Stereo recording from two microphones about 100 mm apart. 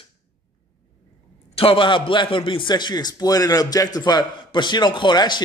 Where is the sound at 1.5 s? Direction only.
65° left (ahead or behind).